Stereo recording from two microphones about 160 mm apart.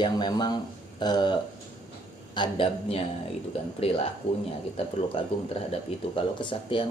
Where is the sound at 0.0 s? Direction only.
30° left (ahead or behind).